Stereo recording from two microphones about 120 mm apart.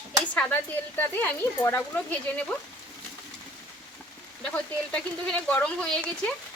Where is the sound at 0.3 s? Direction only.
15° left (ahead or behind).